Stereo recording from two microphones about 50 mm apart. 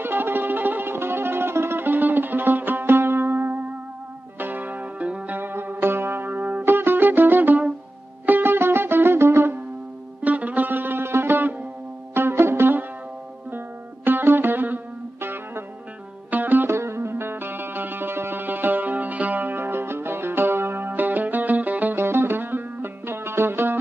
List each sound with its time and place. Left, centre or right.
0.0 s music: right
4.4 s zither: right
5.4 s music: right
10.2 s music: right
16.3 s music: right
16.6 s music: right
21.9 s music: right